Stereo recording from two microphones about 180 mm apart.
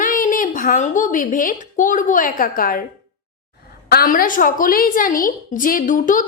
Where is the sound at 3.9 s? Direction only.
55° left (ahead or behind).